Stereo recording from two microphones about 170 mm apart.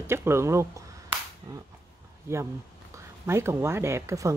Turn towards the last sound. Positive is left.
turn(degrees=-20)  # may be behind; listen again after turning